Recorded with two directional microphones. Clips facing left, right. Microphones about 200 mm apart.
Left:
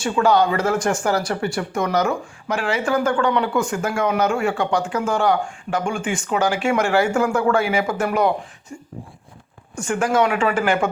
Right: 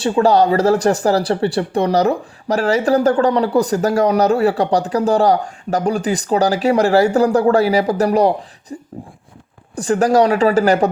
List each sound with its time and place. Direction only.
0.0 s speech: 35° right (ahead or behind)
8.7 s a sound: 30° right (ahead or behind)
9.7 s speech: 35° right (ahead or behind)